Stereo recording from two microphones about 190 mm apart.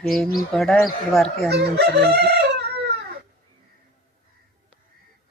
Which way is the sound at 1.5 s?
60° right (ahead or behind).